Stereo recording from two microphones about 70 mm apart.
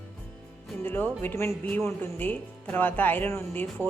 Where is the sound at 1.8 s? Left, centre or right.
Left.